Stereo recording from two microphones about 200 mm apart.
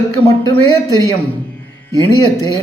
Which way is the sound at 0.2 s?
15° left (ahead or behind).